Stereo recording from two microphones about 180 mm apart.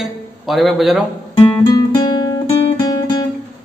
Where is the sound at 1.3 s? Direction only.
25° left (ahead or behind).